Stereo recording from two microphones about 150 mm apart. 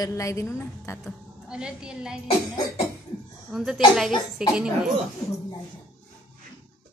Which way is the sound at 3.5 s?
5° right (ahead or behind).